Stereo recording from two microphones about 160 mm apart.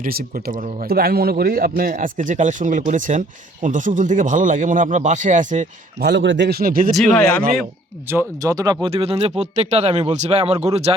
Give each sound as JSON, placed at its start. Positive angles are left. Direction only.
{"t": 0.0, "sound": "speech", "side_deg": -65}
{"t": 6.0, "sound": "speech", "side_deg": -90}
{"t": 6.9, "sound": "speech", "side_deg": 5}
{"t": 8.4, "sound": "speech", "side_deg": -25}
{"t": 8.9, "sound": "speech", "side_deg": -35}